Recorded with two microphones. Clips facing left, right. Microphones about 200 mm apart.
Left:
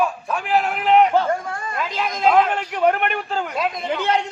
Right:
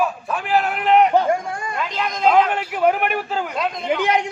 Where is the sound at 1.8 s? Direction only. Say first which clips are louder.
Left 1 dB; centre (ahead or behind).